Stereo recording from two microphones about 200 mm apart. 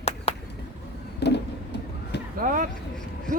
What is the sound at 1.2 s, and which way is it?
Vehicle, 55° left (ahead or behind).